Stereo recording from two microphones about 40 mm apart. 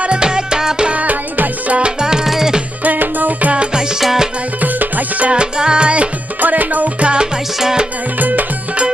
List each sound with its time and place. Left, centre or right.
0.0 s music: right
0.9 s music: right
1.8 s music: centre
2.8 s music: right
3.5 s music: right
4.0 s music: centre
4.6 s music: right
5.3 s music: right
6.4 s music: right
7.0 s music: right
7.6 s music: centre
8.2 s music: right